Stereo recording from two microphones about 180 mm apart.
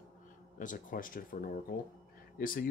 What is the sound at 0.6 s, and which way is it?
Speech, 45° left (ahead or behind).